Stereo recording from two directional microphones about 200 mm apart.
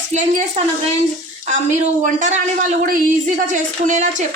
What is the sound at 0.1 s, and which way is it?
Speech, 35° right (ahead or behind).